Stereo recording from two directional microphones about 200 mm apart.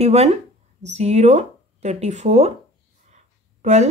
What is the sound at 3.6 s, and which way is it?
Speech, 35° right (ahead or behind).